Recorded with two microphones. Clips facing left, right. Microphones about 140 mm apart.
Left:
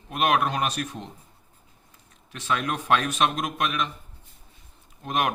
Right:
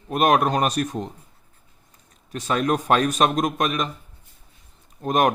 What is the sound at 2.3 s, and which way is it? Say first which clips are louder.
A man's voice: right 6 dB; 40° right (ahead or behind).